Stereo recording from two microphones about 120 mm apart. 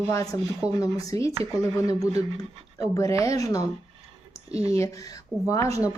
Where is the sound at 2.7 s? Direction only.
30° left (ahead or behind).